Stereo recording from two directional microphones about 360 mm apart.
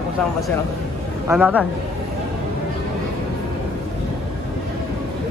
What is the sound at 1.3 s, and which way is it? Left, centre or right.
Speech, centre.